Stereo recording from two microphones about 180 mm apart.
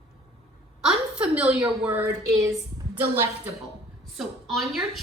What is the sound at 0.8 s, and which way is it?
A woman's voice, 5° right (ahead or behind).